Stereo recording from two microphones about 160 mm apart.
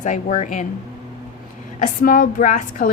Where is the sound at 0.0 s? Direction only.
50° left (ahead or behind).